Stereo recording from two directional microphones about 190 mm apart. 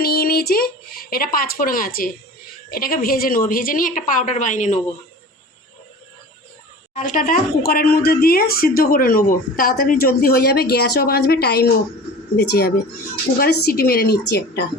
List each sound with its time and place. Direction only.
0.0 s a sound: 50° left (ahead or behind)
2.6 s speech: 50° left (ahead or behind)
6.9 s a woman's voice: 45° left (ahead or behind); by 14.6 s 60° left (ahead or behind)